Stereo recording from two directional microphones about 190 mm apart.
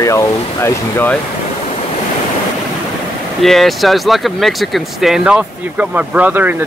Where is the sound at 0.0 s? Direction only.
15° left (ahead or behind).